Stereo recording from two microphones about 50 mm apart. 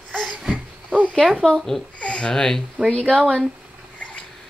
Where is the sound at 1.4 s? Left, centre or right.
Centre.